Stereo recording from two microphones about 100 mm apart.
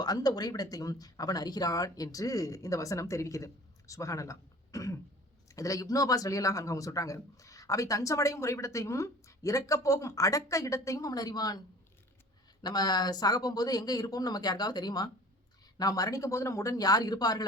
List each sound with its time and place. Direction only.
0.0 s speech: 40° left (ahead or behind)
12.6 s speech: 40° left (ahead or behind)